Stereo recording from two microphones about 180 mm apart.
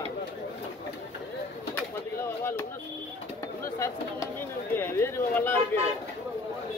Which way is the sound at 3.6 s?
15° left (ahead or behind).